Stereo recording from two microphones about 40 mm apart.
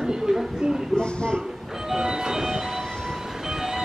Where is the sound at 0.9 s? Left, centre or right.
Left.